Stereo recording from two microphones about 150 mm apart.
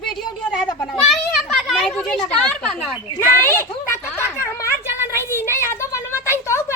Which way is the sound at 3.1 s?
15° left (ahead or behind).